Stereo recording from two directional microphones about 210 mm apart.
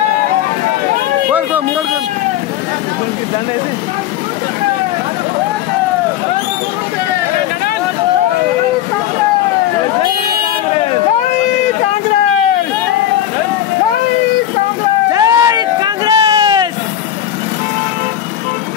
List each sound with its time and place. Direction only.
15.1 s vehicle: 15° right (ahead or behind)